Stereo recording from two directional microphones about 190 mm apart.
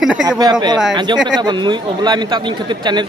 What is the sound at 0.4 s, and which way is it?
Speech, 20° right (ahead or behind).